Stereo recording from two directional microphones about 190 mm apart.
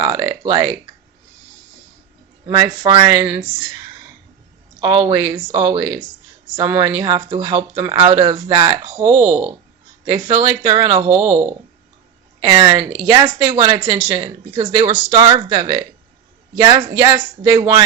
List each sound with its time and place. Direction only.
0.0 s a woman's voice: 20° right (ahead or behind)
2.5 s speech: 20° right (ahead or behind)
5.1 s a woman's voice: 20° right (ahead or behind)
9.0 s a woman's voice: 35° right (ahead or behind)
12.4 s a woman's voice: 20° right (ahead or behind)